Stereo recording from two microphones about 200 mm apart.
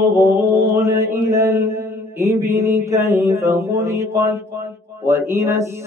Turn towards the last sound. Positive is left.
turn(degrees=-15)  # may be behind; listen again after turning